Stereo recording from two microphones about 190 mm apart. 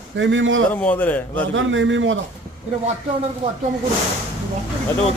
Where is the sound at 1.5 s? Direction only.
80° right.